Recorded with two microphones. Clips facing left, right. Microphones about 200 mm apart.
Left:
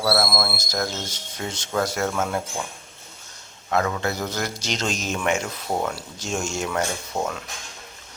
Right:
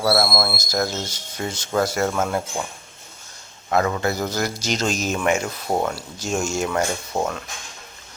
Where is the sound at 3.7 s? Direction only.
5° right (ahead or behind).